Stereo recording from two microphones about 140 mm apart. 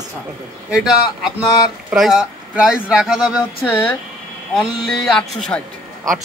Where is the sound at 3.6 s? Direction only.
15° left (ahead or behind).